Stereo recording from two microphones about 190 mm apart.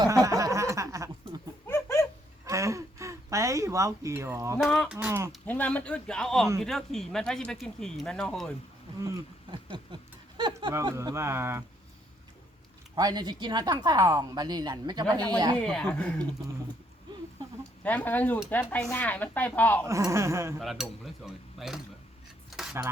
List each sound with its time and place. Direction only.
0.0 s a sound: 15° right (ahead or behind)
1.6 s a sound: 15° left (ahead or behind)
2.4 s a sound: 15° right (ahead or behind)
4.6 s speech: centre (ahead or behind)
5.5 s speech: 10° left (ahead or behind)
9.0 s speech: 15° right (ahead or behind)
9.9 s a sound: 25° right (ahead or behind)
10.3 s speech: 25° right (ahead or behind)
13.0 s a woman's voice: 20° right (ahead or behind)
15.5 s speech: 5° left (ahead or behind)
17.8 s speech: 10° left (ahead or behind)
19.9 s speech: 15° right (ahead or behind)
20.6 s speech: centre (ahead or behind)
22.4 s cutlery: centre (ahead or behind)